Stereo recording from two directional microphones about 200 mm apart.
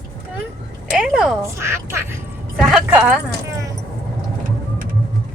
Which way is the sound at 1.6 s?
15° right (ahead or behind).